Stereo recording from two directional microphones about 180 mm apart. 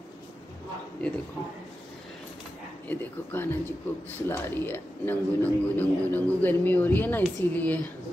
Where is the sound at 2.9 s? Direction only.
10° left (ahead or behind).